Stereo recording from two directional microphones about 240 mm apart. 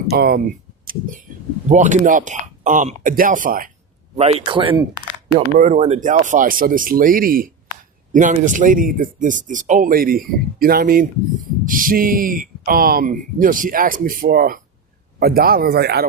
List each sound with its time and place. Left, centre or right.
0.1 s a man's voice: right
5.5 s speech: right